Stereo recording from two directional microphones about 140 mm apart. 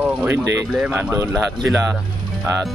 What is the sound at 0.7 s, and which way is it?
Speech, 10° right (ahead or behind).